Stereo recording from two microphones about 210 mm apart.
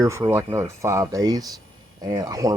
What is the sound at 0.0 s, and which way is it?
Speech, 15° right (ahead or behind).